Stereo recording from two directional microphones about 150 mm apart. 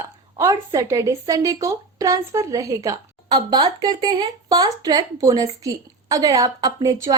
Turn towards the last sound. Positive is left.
turn(degrees=-25)  # may be behind; listen again after turning